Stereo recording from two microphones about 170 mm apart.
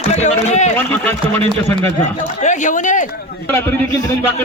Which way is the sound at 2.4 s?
45° left (ahead or behind).